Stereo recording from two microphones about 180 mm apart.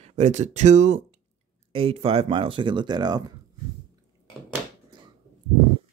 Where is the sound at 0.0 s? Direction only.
40° right (ahead or behind); by 3.3 s 20° right (ahead or behind).